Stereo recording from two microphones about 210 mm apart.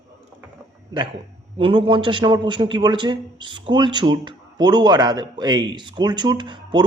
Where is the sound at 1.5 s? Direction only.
25° right (ahead or behind).